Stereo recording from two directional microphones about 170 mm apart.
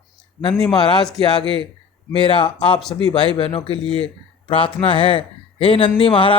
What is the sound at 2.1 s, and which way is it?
A man's voice, 30° left (ahead or behind).